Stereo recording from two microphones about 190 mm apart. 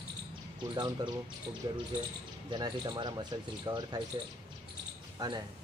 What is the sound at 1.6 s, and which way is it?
Speech, 25° right (ahead or behind).